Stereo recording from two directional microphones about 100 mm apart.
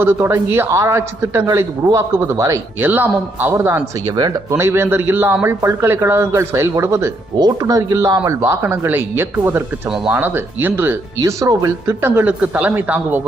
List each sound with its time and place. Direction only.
0.0 s a man's voice: 25° right (ahead or behind)
2.8 s a man's voice: 20° right (ahead or behind)
3.5 s a man's voice: 30° right (ahead or behind)
4.0 s speech: 45° right (ahead or behind)
4.5 s a man's voice: 25° right (ahead or behind)
7.3 s speech: 40° right (ahead or behind)
8.4 s a man's voice: 25° right (ahead or behind)
9.9 s speech: 5° right (ahead or behind)
10.2 s a man's voice: 20° right (ahead or behind)
11.2 s speech: 30° right (ahead or behind)
12.0 s speech: 20° right (ahead or behind)